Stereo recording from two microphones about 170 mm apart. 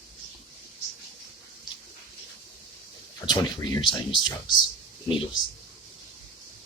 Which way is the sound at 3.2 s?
25° left (ahead or behind).